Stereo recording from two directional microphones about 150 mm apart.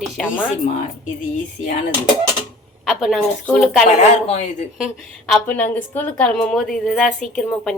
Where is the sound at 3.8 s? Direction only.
50° left (ahead or behind).